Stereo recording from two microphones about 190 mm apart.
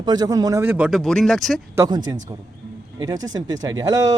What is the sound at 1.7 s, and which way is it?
Speech, 20° right (ahead or behind).